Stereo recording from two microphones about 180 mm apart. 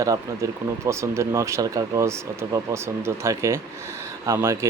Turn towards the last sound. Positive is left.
turn(degrees=-15)  # may be behind; listen again after turning